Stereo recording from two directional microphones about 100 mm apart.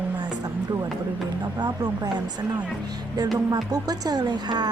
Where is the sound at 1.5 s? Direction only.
45° right (ahead or behind).